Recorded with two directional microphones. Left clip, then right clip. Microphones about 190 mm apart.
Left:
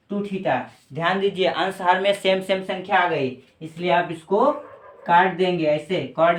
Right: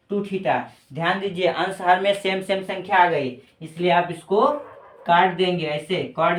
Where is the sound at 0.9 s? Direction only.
30° left (ahead or behind).